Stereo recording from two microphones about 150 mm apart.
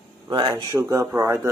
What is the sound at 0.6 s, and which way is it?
Speech, 25° right (ahead or behind).